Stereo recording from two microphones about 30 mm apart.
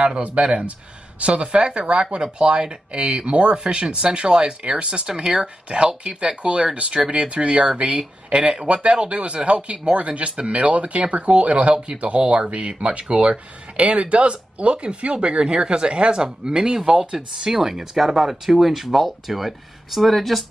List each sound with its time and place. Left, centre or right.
0.2 s speech: right
15.1 s speech: right
16.2 s speech: right
17.5 s speech: centre